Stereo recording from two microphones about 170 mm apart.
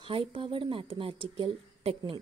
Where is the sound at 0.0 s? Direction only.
30° right (ahead or behind).